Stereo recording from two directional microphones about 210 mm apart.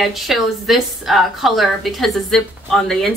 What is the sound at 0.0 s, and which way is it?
A woman's voice, centre (ahead or behind).